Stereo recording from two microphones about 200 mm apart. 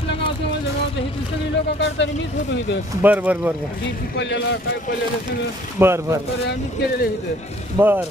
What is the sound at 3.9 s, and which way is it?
Speech, 65° left (ahead or behind).